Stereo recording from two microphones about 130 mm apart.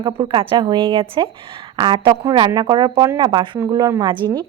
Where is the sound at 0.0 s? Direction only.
40° right (ahead or behind).